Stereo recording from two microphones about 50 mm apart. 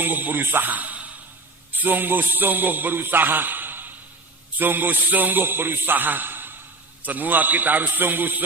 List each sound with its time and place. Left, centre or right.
0.0 s speech: right